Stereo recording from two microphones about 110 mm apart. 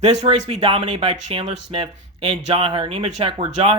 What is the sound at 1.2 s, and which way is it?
Speech, 80° right.